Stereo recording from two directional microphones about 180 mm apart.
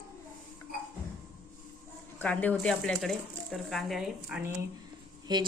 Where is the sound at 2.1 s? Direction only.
10° left (ahead or behind).